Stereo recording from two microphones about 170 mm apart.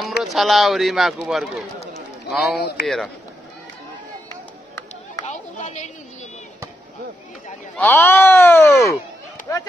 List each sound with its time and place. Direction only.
0.2 s speech: centre (ahead or behind)
5.2 s a child's voice: 40° left (ahead or behind)
7.7 s speech: 10° left (ahead or behind)